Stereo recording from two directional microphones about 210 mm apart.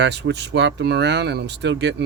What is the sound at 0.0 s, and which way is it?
Speech, 55° right (ahead or behind).